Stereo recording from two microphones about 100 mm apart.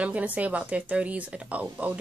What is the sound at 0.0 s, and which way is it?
Speech, 15° right (ahead or behind).